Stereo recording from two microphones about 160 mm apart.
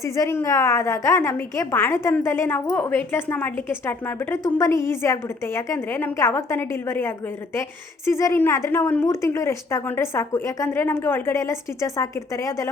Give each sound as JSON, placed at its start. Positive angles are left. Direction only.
{"t": 0.0, "sound": "a woman's voice", "side_deg": 15}